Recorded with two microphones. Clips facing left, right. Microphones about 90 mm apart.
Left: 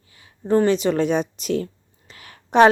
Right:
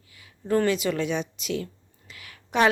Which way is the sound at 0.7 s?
35° left (ahead or behind).